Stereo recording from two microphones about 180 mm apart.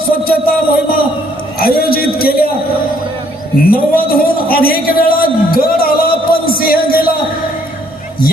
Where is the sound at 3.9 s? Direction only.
55° left (ahead or behind).